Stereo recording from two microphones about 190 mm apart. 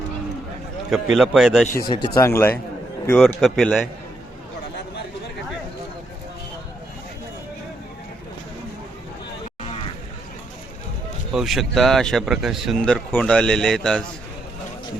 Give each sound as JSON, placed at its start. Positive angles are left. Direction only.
{"t": 1.1, "sound": "speech", "side_deg": 0}
{"t": 1.7, "sound": "speech", "side_deg": 20}
{"t": 3.2, "sound": "speech", "side_deg": 0}
{"t": 11.3, "sound": "speech", "side_deg": 0}